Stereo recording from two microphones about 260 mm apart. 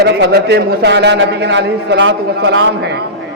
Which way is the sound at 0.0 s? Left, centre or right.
Right.